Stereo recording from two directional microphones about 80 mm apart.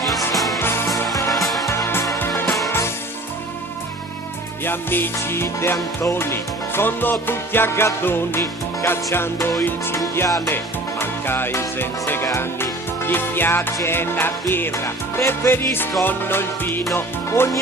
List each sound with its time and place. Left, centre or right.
0.3 s music: centre
0.6 s music: left
1.3 s music: centre
1.6 s music: left
4.6 s music: left
10.2 s music: left
11.0 s music: left